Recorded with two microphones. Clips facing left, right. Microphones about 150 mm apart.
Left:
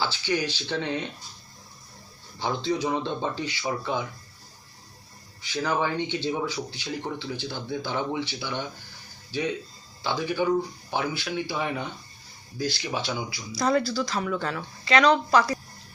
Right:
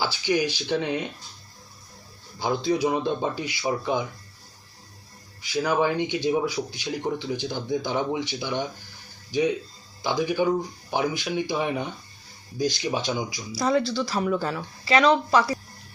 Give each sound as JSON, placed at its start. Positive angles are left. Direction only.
{"t": 0.0, "sound": "speech", "side_deg": -15}
{"t": 2.4, "sound": "speech", "side_deg": -10}
{"t": 5.4, "sound": "speech", "side_deg": -10}
{"t": 13.6, "sound": "speech", "side_deg": 0}